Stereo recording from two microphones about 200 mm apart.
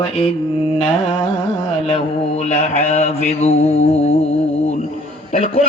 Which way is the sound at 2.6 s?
35° left (ahead or behind).